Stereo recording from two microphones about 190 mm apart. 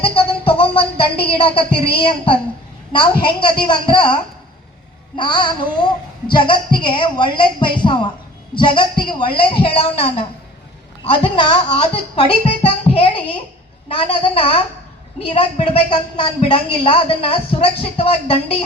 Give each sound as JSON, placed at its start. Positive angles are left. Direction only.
{"t": 0.0, "sound": "music", "side_deg": 30}
{"t": 2.9, "sound": "a woman's voice", "side_deg": 25}